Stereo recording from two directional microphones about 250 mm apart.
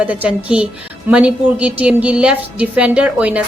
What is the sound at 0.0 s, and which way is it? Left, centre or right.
A woman's voice, centre.